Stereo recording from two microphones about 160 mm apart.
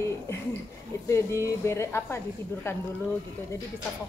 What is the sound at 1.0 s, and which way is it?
Speech, 15° left (ahead or behind).